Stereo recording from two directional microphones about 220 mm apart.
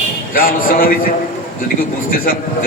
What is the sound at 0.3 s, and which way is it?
A man's voice, 40° left (ahead or behind).